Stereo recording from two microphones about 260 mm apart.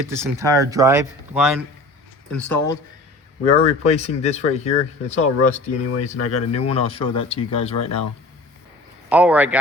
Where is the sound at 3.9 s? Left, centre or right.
Left.